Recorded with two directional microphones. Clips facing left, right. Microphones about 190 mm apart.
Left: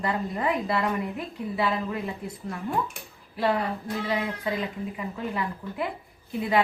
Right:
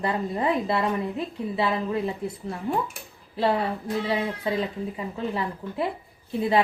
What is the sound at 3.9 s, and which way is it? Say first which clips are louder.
A woman's voice: right 3 dB; 35° right (ahead or behind).